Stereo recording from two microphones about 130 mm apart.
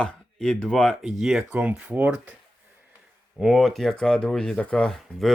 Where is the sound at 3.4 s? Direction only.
Centre (ahead or behind).